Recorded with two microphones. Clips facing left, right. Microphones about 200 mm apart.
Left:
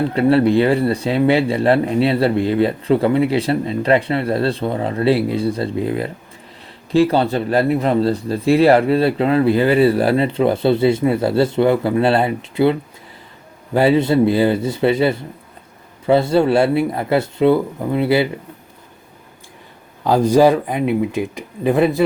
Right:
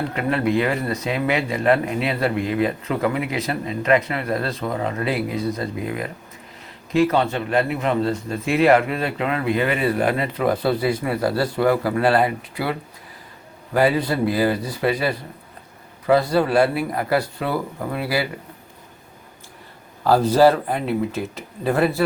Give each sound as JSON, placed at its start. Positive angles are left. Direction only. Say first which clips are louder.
{"t": 0.1, "sound": "speech", "louder": "left 9 dB", "side_deg": 35}
{"t": 13.7, "sound": "a man's voice", "louder": "left 5 dB", "side_deg": 25}
{"t": 20.1, "sound": "speech", "louder": "left 2 dB", "side_deg": 15}